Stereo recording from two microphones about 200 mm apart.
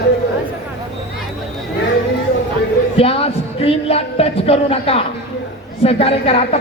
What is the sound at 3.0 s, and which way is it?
Speech, 30° left (ahead or behind).